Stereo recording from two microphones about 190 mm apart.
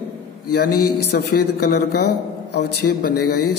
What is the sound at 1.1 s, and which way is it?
A man's voice, 60° left (ahead or behind).